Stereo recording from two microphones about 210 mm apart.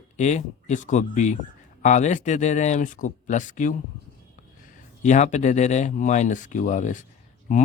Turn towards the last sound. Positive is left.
turn(degrees=40)  # may be behind; listen again after turning